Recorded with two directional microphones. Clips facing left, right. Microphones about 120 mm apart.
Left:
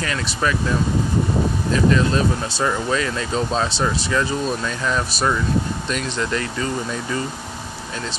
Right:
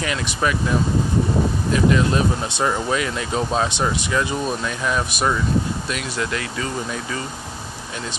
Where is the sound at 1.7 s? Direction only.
15° right (ahead or behind).